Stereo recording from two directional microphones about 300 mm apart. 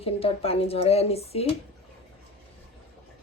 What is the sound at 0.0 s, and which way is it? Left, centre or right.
A woman's voice, centre.